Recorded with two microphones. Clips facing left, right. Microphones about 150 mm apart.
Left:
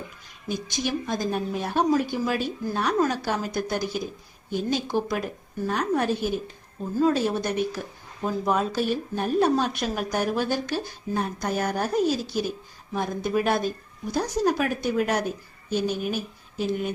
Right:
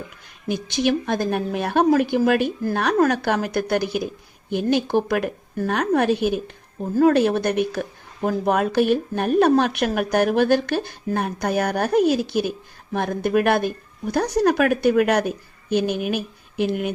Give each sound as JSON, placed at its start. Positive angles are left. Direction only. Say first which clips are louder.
{"t": 0.4, "sound": "a woman's voice", "louder": "right 7 dB", "side_deg": -65}